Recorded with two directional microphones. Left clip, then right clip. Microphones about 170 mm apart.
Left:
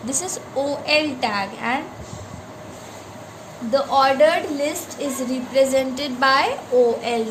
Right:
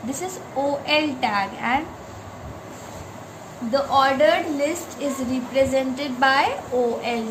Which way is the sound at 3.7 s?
35° left (ahead or behind).